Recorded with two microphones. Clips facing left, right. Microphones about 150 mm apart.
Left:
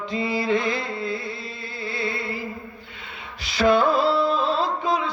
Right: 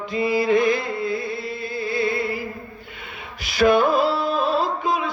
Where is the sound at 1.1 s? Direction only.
20° left (ahead or behind).